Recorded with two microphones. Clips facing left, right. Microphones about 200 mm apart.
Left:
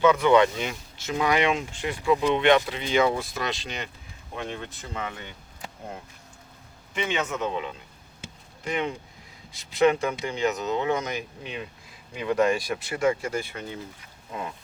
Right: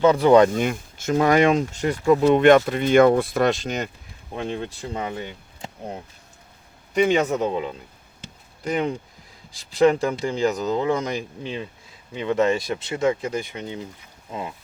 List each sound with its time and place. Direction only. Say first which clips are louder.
0.0 s speech: right 4 dB; 35° right (ahead or behind)
4.4 s speech: right 6 dB; 30° right (ahead or behind)
6.9 s speech: right 9 dB; 40° right (ahead or behind); by 13.8 s 20° right (ahead or behind)